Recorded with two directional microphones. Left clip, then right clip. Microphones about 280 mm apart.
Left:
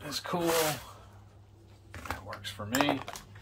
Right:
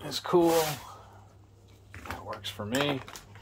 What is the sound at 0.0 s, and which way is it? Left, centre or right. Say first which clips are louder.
Speech: right 7 dB; right.